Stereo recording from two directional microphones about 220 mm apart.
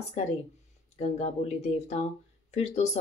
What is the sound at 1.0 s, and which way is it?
Speech, 30° left (ahead or behind).